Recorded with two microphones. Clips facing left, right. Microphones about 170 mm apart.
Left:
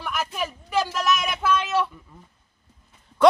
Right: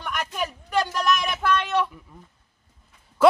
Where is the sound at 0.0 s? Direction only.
Centre (ahead or behind).